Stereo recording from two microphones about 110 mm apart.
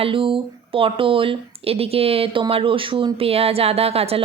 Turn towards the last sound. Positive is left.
turn(degrees=-65)  # may be behind; listen again after turning